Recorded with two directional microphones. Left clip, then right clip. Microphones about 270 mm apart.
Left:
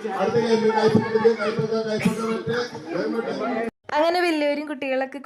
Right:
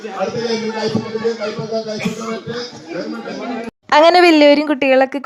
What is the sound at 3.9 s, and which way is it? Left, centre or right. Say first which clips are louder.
Speech: right 12 dB; right.